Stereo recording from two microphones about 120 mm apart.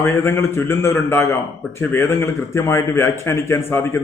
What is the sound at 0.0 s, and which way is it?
A man's voice, 20° left (ahead or behind).